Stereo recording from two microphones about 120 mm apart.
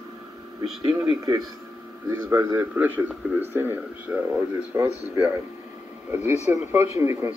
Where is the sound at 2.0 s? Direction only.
20° right (ahead or behind).